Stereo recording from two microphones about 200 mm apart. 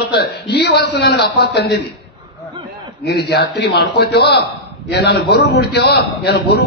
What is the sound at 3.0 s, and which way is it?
A man's voice, 60° left (ahead or behind).